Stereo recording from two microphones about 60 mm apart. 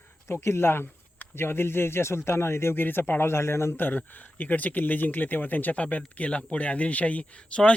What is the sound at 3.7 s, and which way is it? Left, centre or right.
Speech, left.